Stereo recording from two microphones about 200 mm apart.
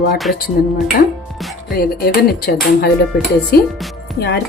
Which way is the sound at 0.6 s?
45° left (ahead or behind).